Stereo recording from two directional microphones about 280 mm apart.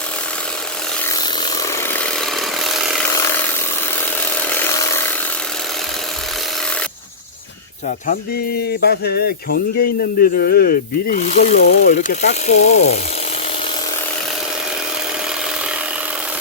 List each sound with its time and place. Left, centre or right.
1.9 s sawing: centre
3.1 s sawing: centre
4.4 s sawing: centre
7.9 s speech: left